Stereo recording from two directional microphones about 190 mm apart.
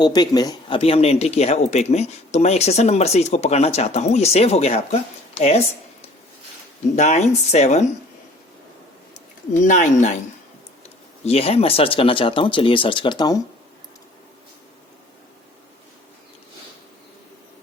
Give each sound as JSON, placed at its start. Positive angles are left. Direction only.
{"t": 0.0, "sound": "speech", "side_deg": 20}
{"t": 6.9, "sound": "speech", "side_deg": 40}
{"t": 9.6, "sound": "speech", "side_deg": 40}